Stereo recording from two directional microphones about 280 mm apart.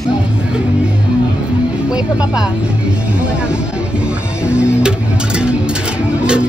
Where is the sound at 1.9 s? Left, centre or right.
Centre.